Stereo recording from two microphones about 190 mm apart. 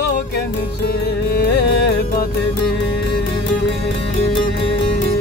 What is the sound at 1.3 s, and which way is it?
Music, 55° left (ahead or behind).